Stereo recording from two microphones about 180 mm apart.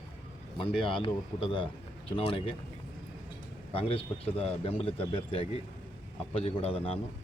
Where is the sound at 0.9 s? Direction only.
30° left (ahead or behind).